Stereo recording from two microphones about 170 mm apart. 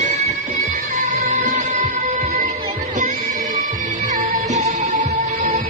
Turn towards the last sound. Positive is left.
turn(degrees=-50)  # may be behind; listen again after turning